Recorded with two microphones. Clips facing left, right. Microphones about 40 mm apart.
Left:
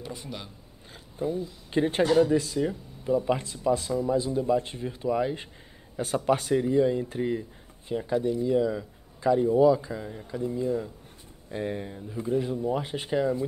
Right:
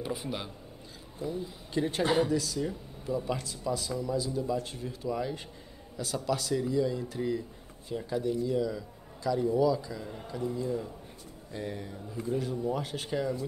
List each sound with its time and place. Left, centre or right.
0.0 s speech: centre
1.2 s a man's voice: left
2.7 s speech: centre
3.3 s a man's voice: left
7.9 s a man's voice: left